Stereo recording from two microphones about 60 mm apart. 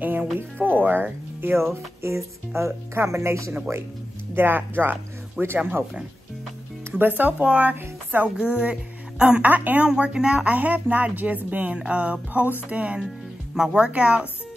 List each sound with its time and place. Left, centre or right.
0.0 s speech: right
1.4 s speech: right
4.4 s a woman's voice: right
6.9 s a woman's voice: right
8.4 s a woman's voice: centre
9.8 s speech: centre
10.5 s a woman's voice: right
13.6 s speech: centre